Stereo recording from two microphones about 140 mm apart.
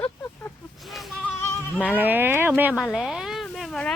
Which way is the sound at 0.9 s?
Centre (ahead or behind).